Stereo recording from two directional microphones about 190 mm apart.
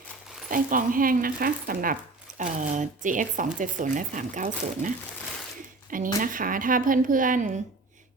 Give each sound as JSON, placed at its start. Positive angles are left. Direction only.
{"t": 0.5, "sound": "speech", "side_deg": -45}